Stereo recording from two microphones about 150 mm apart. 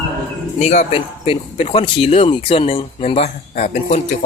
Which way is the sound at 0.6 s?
50° left (ahead or behind).